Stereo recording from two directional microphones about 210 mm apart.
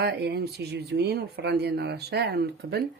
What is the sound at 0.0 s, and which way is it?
Speech, 50° right (ahead or behind).